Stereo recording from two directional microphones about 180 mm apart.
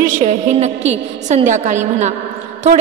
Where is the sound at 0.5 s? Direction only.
35° right (ahead or behind).